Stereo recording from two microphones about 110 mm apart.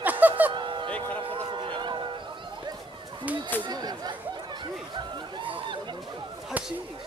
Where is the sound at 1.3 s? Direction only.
50° right (ahead or behind).